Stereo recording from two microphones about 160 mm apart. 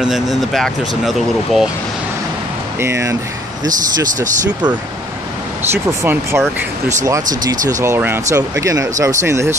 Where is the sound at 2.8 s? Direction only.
20° right (ahead or behind).